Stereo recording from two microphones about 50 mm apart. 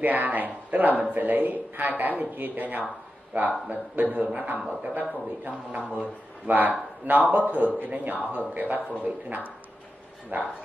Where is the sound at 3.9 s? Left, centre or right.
Right.